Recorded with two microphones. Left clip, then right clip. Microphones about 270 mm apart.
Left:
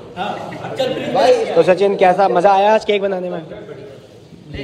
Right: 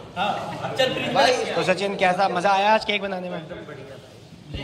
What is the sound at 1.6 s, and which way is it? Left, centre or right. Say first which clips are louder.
A man's voice: left 10 dB; centre.